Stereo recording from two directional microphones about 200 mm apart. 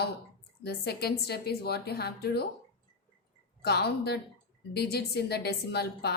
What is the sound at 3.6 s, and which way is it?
Speech, 55° left (ahead or behind).